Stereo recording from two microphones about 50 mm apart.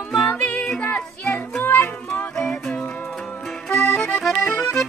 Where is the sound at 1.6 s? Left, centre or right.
Left.